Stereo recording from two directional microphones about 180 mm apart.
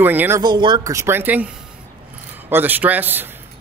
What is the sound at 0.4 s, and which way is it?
A man's voice, 25° right (ahead or behind).